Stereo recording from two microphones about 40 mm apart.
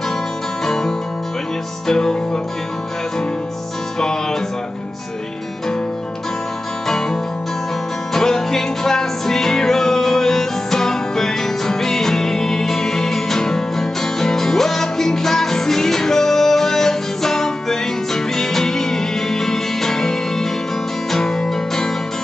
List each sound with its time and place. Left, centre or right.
0.7 s music: centre
4.0 s music: centre
8.1 s music: centre